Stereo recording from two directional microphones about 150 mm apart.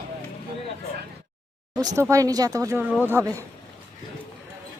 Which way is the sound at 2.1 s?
25° right (ahead or behind).